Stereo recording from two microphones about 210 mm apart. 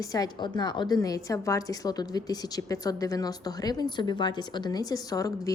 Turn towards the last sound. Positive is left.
turn(degrees=15)  # may be behind; listen again after turning